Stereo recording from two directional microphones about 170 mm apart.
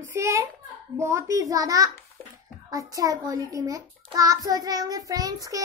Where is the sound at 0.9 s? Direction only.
15° right (ahead or behind).